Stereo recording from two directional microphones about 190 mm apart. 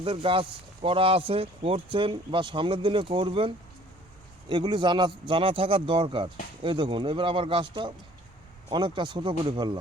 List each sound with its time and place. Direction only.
0.0 s speech: 25° right (ahead or behind)